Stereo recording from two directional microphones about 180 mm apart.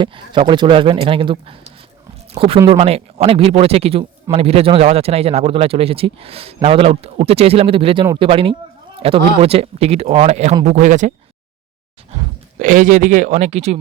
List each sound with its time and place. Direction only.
0.0 s a man's voice: 25° right (ahead or behind); by 11.1 s 45° right (ahead or behind)
12.5 s speech: 45° right (ahead or behind)